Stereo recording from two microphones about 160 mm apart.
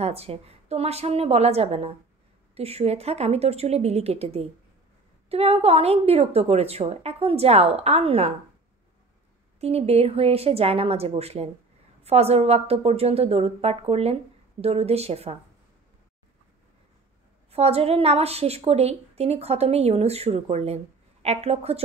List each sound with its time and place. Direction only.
0.0 s a woman's voice: 40° right (ahead or behind)
9.6 s a woman's voice: 40° right (ahead or behind)
17.5 s a woman's voice: 40° right (ahead or behind)